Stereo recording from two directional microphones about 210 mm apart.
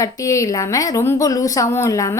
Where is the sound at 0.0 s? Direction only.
15° left (ahead or behind).